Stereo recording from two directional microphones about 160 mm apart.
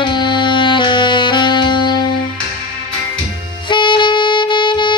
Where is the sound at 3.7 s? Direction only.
30° left (ahead or behind).